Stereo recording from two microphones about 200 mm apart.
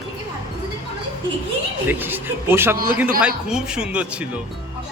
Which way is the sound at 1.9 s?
10° right (ahead or behind).